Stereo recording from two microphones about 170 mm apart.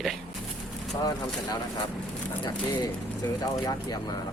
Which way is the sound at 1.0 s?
20° left (ahead or behind).